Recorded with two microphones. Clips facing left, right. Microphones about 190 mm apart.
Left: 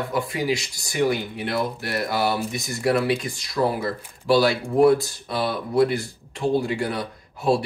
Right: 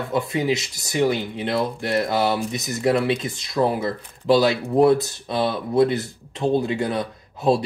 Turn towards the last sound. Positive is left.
turn(degrees=-20)  # may be behind; listen again after turning